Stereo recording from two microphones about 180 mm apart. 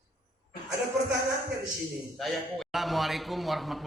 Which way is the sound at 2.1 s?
Centre (ahead or behind).